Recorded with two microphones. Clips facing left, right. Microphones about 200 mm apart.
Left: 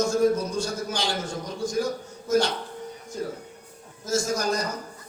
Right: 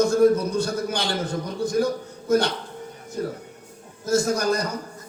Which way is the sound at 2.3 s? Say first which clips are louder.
Right 2 dB; 60° right (ahead or behind).